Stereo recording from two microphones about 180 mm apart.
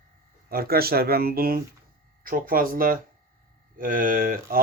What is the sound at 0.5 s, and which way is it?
Speech, 55° right (ahead or behind).